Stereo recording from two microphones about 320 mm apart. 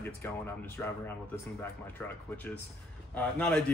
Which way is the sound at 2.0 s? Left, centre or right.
Centre.